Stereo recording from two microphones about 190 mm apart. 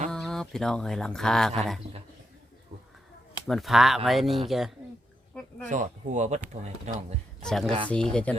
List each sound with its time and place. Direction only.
0.1 s speech: 5° left (ahead or behind)
3.4 s speech: centre (ahead or behind)
5.6 s speech: 40° right (ahead or behind)
7.4 s speech: centre (ahead or behind)